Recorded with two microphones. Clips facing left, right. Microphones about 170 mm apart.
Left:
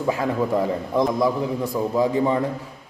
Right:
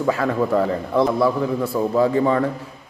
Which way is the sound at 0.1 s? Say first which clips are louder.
Right 2 dB; 15° left (ahead or behind).